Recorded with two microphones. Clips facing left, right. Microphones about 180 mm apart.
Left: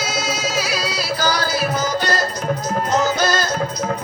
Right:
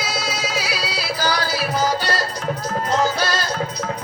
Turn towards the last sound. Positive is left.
turn(degrees=45)  # may be behind; listen again after turning